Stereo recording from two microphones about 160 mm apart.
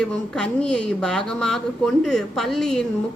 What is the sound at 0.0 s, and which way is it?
Speech, 5° left (ahead or behind).